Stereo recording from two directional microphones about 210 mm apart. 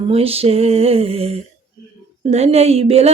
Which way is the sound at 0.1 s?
30° right (ahead or behind).